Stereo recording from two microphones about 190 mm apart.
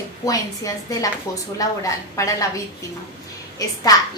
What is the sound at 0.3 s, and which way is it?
A woman's voice, 15° left (ahead or behind).